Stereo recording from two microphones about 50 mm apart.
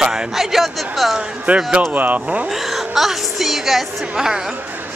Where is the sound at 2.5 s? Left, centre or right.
Centre.